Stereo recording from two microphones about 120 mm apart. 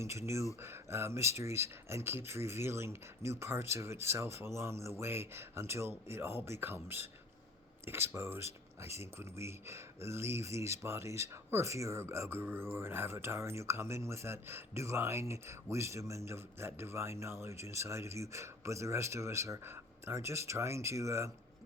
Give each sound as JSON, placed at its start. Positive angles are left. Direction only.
{"t": 0.0, "sound": "speech", "side_deg": -25}